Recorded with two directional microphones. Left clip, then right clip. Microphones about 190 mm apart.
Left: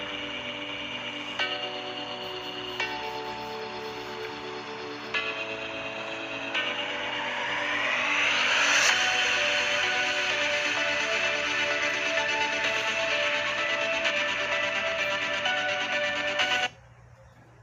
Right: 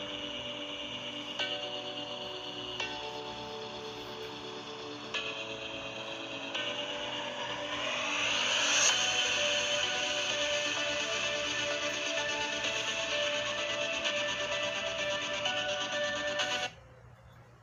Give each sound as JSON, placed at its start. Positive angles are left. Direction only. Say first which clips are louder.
{"t": 6.5, "sound": "music", "louder": "left 6 dB", "side_deg": 20}